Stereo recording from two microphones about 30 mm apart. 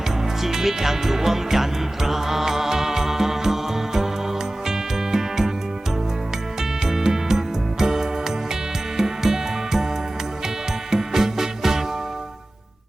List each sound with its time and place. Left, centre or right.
0.4 s music: centre
6.6 s music: centre
10.9 s music: centre